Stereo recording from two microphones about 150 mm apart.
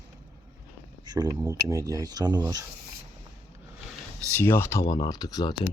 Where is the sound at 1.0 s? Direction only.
25° right (ahead or behind).